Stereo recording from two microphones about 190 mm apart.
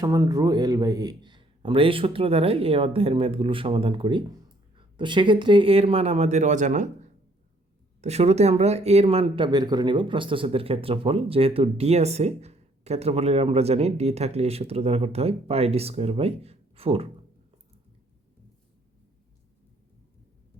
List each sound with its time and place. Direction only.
0.0 s a man's voice: 20° right (ahead or behind)